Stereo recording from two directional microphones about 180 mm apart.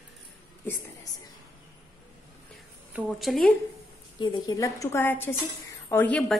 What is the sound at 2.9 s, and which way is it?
Speech, centre (ahead or behind).